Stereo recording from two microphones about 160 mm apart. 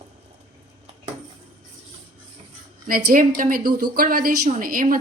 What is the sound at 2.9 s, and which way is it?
A woman's voice, 65° right (ahead or behind).